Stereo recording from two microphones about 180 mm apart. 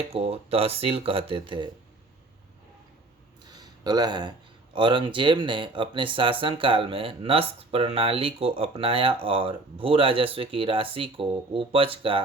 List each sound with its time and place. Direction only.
0.1 s speech: 35° right (ahead or behind)
3.4 s a sound: 20° right (ahead or behind)
4.7 s speech: 25° right (ahead or behind)